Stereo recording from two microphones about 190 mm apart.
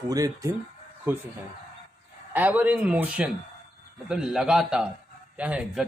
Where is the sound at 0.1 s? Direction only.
20° right (ahead or behind).